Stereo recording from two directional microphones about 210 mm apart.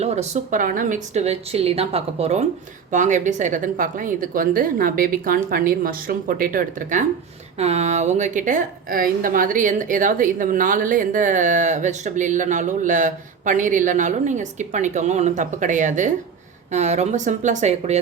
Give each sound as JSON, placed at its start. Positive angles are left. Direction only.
{"t": 0.0, "sound": "a woman's voice", "side_deg": -30}